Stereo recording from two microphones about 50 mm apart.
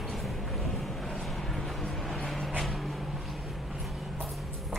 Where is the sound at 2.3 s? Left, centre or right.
Centre.